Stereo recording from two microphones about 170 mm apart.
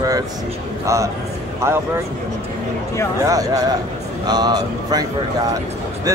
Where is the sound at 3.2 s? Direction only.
20° right (ahead or behind).